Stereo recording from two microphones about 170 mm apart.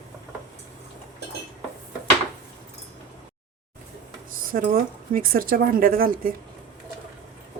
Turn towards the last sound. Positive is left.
turn(degrees=-55)  # may be behind; listen again after turning